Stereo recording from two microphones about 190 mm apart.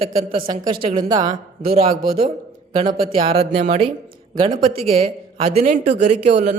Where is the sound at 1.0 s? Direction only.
20° right (ahead or behind).